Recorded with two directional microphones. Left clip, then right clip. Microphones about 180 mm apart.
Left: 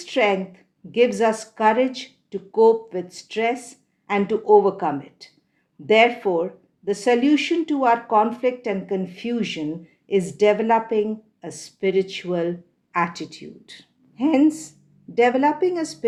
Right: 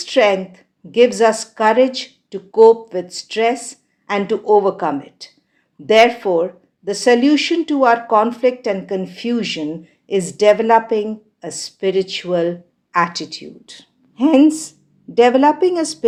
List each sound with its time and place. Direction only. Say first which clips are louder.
0.0 s speech: right 6 dB; 35° right (ahead or behind)